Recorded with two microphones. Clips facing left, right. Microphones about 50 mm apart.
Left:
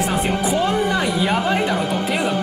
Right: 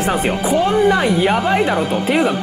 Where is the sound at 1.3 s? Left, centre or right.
Centre.